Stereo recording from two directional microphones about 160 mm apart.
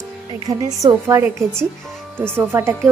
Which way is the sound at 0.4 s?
20° right (ahead or behind).